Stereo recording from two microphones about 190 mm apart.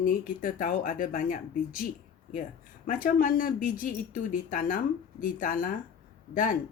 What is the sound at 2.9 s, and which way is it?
Speech, 45° left (ahead or behind).